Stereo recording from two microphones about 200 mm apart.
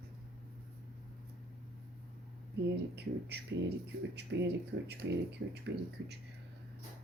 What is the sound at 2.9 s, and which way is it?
Speech, 55° right (ahead or behind).